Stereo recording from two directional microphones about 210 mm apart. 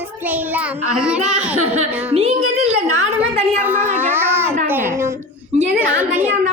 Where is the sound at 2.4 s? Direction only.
90° right.